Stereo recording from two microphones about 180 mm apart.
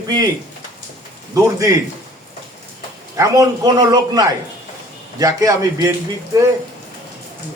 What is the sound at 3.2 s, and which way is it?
A man's voice, 20° right (ahead or behind).